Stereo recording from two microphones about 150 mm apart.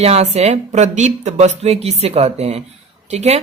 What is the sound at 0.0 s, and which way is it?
Speech, 45° right (ahead or behind).